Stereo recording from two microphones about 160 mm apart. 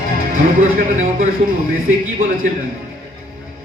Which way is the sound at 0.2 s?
60° right (ahead or behind).